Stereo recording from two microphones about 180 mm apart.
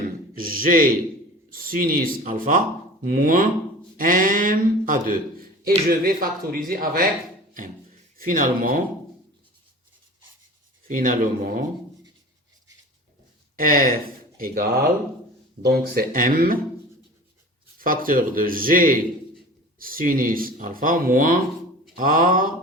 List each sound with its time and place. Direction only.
0.3 s speech: 50° right (ahead or behind)
8.2 s speech: 50° right (ahead or behind)
10.8 s speech: 50° right (ahead or behind)
13.6 s speech: 50° right (ahead or behind)
15.6 s speech: 55° right (ahead or behind)
17.7 s speech: 50° right (ahead or behind)